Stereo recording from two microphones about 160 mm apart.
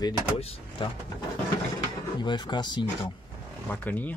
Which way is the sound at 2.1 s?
25° left (ahead or behind).